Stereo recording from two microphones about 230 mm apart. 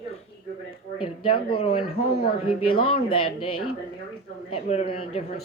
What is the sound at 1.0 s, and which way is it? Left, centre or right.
Speech, left.